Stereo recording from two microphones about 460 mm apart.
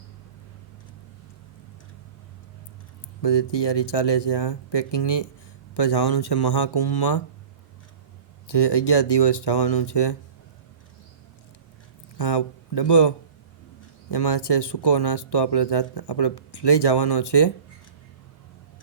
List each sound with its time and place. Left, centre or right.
3.2 s speech: left
8.4 s speech: left
12.1 s speech: left